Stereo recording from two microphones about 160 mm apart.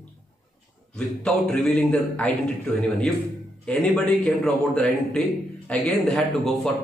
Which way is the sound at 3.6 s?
5° left (ahead or behind).